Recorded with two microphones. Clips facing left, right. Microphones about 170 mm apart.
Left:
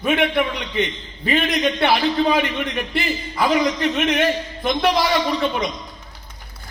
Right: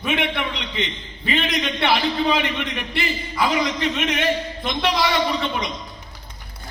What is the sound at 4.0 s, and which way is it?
Speech, 55° left (ahead or behind).